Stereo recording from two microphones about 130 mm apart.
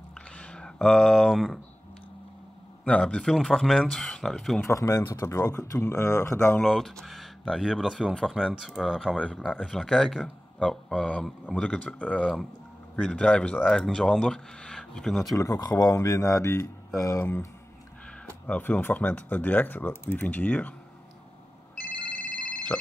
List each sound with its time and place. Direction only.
0.4 s speech: 5° left (ahead or behind)
2.8 s speech: 10° left (ahead or behind)
4.6 s speech: 25° left (ahead or behind)
6.6 s speech: centre (ahead or behind)
15.3 s speech: 30° left (ahead or behind)
18.5 s speech: 10° left (ahead or behind)
22.5 s a sound: 10° left (ahead or behind)